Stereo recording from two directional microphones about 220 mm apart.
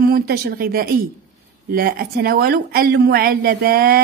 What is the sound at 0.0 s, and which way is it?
A woman's voice, 45° right (ahead or behind).